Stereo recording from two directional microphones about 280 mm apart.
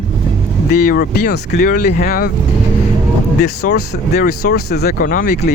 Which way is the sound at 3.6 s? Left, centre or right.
Left.